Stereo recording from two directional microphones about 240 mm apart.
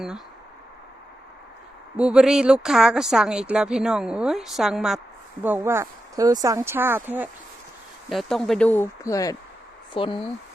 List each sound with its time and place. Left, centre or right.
2.0 s speech: centre